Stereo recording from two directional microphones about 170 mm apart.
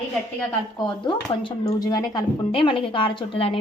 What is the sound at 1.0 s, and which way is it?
Speech, 30° left (ahead or behind).